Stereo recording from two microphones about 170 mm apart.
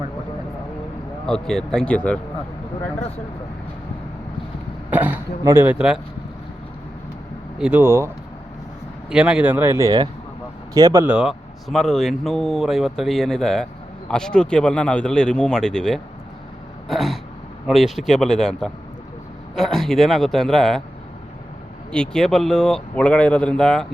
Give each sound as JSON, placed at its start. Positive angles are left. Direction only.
{"t": 1.3, "sound": "speech", "side_deg": 5}
{"t": 4.9, "sound": "speech", "side_deg": -10}
{"t": 7.6, "sound": "speech", "side_deg": -10}
{"t": 11.0, "sound": "speech", "side_deg": -5}
{"t": 16.9, "sound": "throat clearing", "side_deg": 0}
{"t": 17.7, "sound": "speech", "side_deg": 0}
{"t": 21.9, "sound": "speech", "side_deg": 5}